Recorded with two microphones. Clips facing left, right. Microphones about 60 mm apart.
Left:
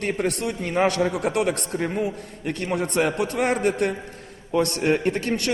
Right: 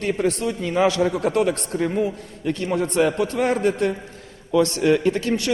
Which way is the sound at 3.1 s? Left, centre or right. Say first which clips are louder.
Right 2 dB; left.